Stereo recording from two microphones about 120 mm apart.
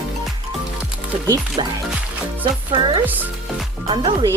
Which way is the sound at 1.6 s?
45° right (ahead or behind).